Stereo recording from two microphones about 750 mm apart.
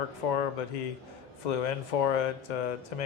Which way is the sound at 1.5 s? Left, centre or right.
Left.